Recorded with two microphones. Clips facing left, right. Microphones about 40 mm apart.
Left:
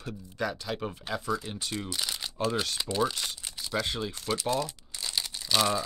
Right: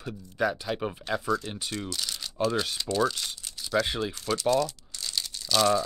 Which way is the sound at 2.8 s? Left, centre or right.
Centre.